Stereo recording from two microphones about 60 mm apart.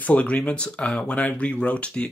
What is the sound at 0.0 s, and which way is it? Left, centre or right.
Speech, left.